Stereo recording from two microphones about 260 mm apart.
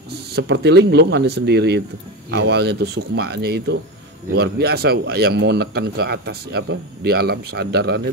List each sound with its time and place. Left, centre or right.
0.1 s speech: right